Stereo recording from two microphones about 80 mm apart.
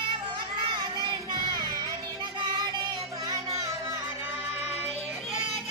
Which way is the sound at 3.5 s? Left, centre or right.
Right.